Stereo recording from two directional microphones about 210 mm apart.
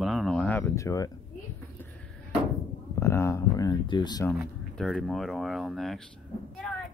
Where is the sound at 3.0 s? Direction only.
15° left (ahead or behind).